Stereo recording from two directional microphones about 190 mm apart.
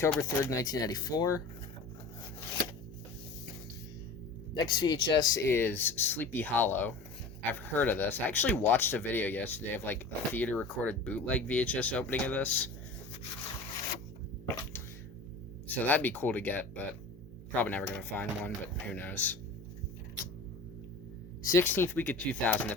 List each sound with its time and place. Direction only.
0.0 s speech: 15° left (ahead or behind)
4.5 s speech: 25° left (ahead or behind); by 12.7 s 10° left (ahead or behind)
15.6 s speech: 10° left (ahead or behind)
21.4 s speech: 10° left (ahead or behind)